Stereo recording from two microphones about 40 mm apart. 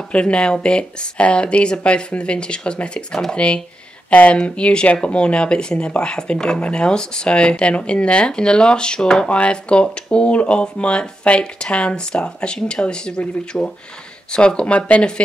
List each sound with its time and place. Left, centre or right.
0.1 s speech: left